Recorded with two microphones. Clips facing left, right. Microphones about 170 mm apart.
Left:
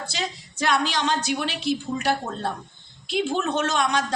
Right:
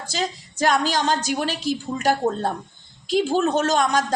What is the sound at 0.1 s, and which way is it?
A woman's voice, 45° right (ahead or behind).